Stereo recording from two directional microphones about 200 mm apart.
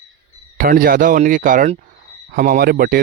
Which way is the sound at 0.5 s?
45° right (ahead or behind).